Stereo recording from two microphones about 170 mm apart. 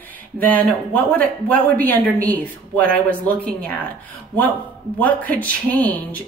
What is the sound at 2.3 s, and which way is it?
Speech, 60° right (ahead or behind).